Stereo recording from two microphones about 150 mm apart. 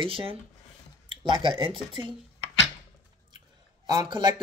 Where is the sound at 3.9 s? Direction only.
25° right (ahead or behind).